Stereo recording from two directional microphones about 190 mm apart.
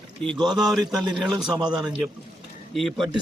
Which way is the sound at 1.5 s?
25° right (ahead or behind).